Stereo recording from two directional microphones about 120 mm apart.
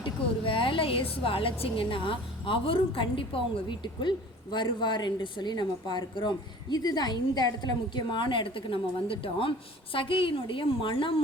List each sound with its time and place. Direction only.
0.0 s a woman's voice: 45° left (ahead or behind)
4.5 s a woman's voice: 40° left (ahead or behind)